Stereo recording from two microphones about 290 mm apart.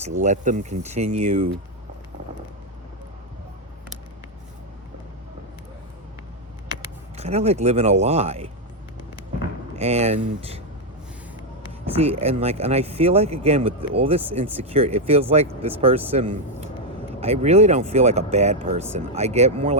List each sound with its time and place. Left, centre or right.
0.0 s speech: right
7.2 s speech: right
9.7 s speech: right
11.9 s speech: right